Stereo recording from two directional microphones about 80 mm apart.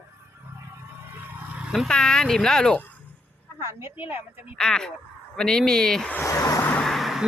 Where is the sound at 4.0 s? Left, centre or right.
Right.